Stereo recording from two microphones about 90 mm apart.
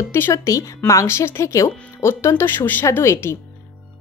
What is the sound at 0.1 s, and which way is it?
A woman's voice, 30° left (ahead or behind).